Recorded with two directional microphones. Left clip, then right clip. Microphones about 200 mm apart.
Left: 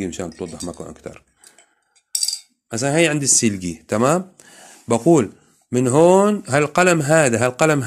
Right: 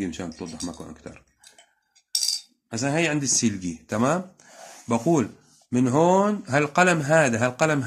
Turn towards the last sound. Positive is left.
turn(degrees=40)  # may be behind; listen again after turning